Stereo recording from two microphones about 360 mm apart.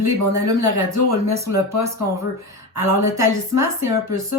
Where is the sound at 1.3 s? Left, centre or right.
Centre.